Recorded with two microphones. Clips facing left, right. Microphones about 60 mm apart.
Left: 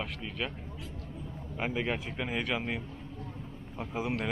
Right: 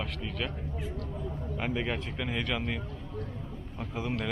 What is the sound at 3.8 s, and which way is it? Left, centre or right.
Speech, centre.